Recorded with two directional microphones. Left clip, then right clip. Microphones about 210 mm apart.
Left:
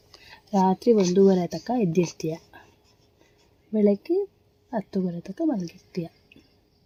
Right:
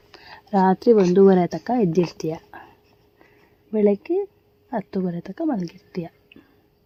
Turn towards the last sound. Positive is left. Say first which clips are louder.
# right 2 dB
turn(degrees=0)  # may be behind; listen again after turning